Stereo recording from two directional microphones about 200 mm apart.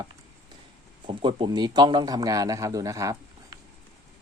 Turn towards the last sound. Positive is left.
turn(degrees=-15)  # may be behind; listen again after turning